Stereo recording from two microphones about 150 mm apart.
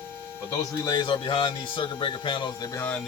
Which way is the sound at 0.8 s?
25° left (ahead or behind).